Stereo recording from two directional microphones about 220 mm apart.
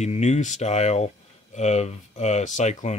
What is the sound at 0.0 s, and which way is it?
Speech, 30° left (ahead or behind).